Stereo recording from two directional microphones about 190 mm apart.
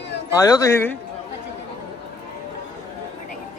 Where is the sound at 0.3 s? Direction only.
15° left (ahead or behind).